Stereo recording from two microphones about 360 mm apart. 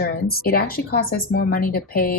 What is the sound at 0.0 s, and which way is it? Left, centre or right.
A woman's voice, left.